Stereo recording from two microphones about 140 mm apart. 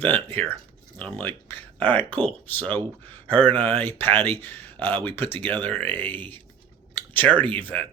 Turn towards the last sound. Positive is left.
turn(degrees=10)  # may be behind; listen again after turning